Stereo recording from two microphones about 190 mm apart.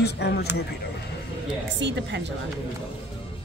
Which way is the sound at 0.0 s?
60° left (ahead or behind).